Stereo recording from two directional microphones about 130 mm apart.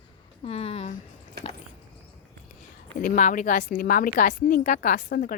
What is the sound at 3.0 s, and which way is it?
A woman's voice, 90° left.